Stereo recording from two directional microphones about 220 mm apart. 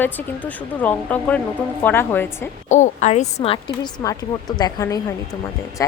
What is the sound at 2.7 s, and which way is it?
A woman's voice, 30° left (ahead or behind).